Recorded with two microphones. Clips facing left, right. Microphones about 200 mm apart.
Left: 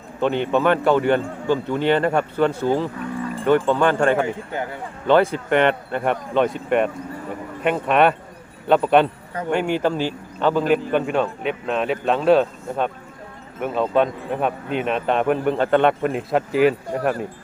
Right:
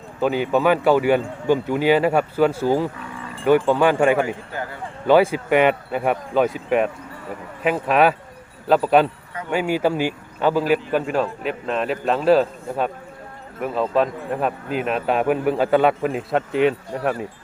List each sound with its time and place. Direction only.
0.2 s a man's voice: 5° right (ahead or behind)
4.5 s speech: 20° left (ahead or behind)
5.0 s speech: 10° right (ahead or behind)